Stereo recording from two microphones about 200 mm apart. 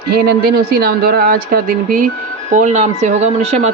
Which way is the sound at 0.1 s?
50° right (ahead or behind).